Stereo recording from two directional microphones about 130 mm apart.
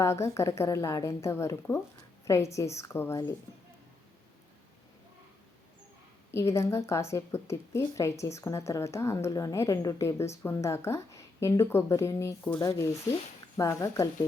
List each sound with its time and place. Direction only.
0.0 s a woman's voice: 20° left (ahead or behind)
6.3 s a woman's voice: 20° left (ahead or behind)